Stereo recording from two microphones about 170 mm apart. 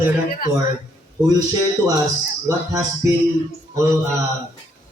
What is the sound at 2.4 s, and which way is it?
Speech, 20° right (ahead or behind).